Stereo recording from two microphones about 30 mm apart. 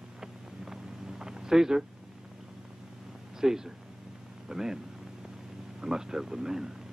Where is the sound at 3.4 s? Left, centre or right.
Centre.